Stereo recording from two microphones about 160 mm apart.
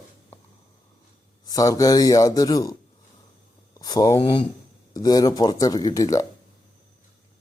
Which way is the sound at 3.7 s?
25° left (ahead or behind).